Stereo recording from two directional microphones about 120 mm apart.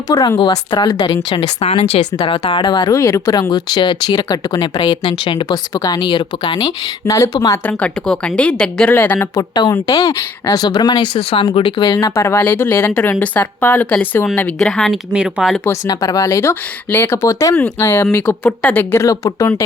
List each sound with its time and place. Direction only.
0.1 s speech: 30° left (ahead or behind); by 1.5 s 45° left (ahead or behind)
1.5 s speech: 60° left (ahead or behind)
2.1 s speech: 40° left (ahead or behind)
5.7 s speech: 30° left (ahead or behind)
7.4 s a woman's voice: 20° left (ahead or behind)
9.3 s speech: 30° left (ahead or behind)
11.9 s a woman's voice: 25° left (ahead or behind)
14.6 s speech: 5° left (ahead or behind)
15.9 s a woman's voice: 30° left (ahead or behind)